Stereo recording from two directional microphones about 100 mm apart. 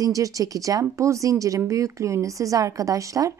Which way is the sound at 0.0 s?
35° right (ahead or behind).